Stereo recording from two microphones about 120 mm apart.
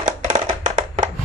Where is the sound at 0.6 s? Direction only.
90° right.